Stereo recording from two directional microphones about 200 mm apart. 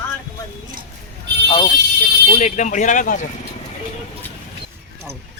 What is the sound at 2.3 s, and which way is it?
Speech, 35° left (ahead or behind).